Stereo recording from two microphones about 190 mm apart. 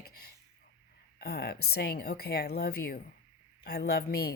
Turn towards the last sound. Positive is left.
turn(degrees=55)  # may be behind; listen again after turning